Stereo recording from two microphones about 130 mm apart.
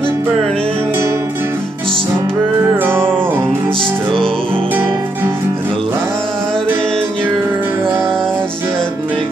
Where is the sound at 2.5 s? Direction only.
15° right (ahead or behind).